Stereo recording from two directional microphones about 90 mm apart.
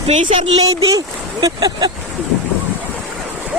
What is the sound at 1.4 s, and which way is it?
Speech, 50° right (ahead or behind).